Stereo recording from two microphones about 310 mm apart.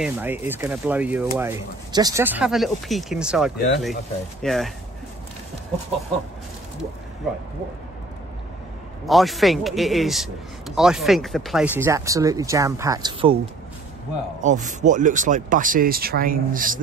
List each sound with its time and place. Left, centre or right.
0.0 s a man's voice: centre
9.0 s a man's voice: centre
14.4 s speech: right